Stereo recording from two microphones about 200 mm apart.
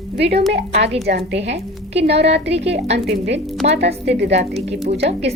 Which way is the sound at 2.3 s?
30° right (ahead or behind).